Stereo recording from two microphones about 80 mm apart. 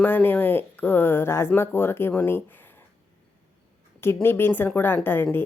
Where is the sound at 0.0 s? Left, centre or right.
Left.